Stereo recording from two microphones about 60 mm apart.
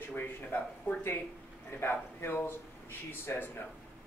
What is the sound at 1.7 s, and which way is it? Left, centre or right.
Speech, left.